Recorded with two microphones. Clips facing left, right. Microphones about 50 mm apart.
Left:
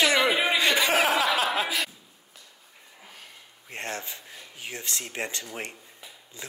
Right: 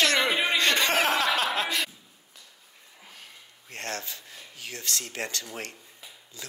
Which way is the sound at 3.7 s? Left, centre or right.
Left.